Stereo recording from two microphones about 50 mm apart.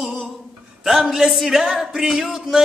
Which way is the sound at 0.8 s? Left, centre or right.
Centre.